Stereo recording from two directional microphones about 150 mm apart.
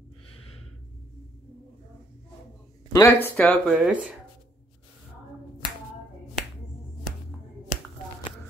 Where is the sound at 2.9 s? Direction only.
15° left (ahead or behind).